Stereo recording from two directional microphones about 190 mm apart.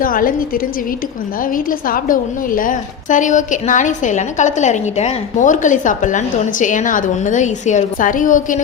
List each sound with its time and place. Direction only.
0.0 s a woman's voice: 50° left (ahead or behind)